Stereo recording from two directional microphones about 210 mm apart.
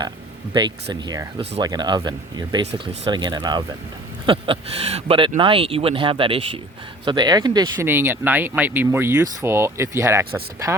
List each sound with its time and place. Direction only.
0.5 s speech: 20° right (ahead or behind)